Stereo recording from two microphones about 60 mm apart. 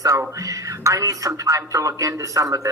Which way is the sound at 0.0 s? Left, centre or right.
Right.